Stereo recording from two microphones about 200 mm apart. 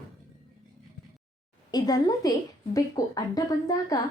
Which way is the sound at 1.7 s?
20° left (ahead or behind).